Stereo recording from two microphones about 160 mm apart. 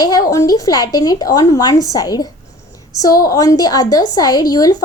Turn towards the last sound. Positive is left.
turn(degrees=25)  # may be behind; listen again after turning